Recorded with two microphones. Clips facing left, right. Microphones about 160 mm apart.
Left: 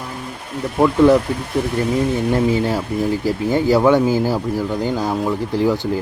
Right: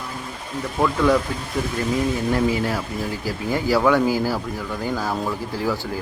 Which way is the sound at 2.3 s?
25° left (ahead or behind).